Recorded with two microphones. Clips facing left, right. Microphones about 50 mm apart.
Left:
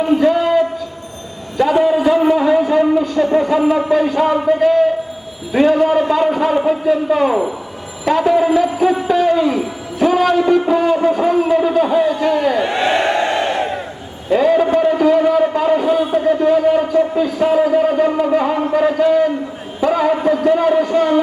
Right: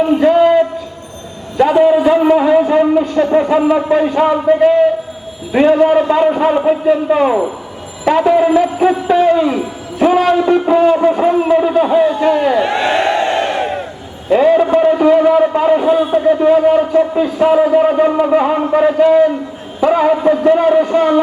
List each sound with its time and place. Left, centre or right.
0.2 s a sound: right
5.5 s a man's voice: right
12.9 s crowd: right
14.3 s a man's voice: right